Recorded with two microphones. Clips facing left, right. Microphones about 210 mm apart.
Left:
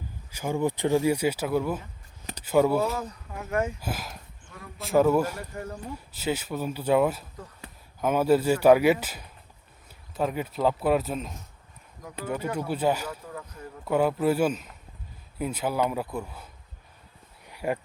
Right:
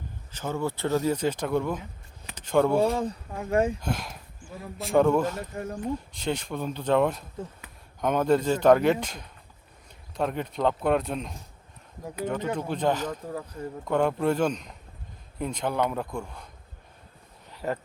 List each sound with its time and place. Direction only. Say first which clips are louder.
0.3 s speech: left 3 dB; 10° left (ahead or behind)
3.0 s speech: right 6 dB; 30° right (ahead or behind)
3.8 s speech: right 3 dB; 5° left (ahead or behind)
12.5 s speech: left 2 dB; 10° left (ahead or behind)
13.2 s speech: right 5 dB; 35° right (ahead or behind)
13.8 s speech: left 1 dB; 5° left (ahead or behind)
17.5 s a sound: left 2 dB; 10° left (ahead or behind)